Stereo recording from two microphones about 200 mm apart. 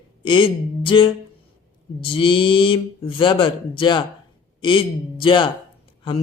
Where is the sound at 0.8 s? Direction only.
25° left (ahead or behind).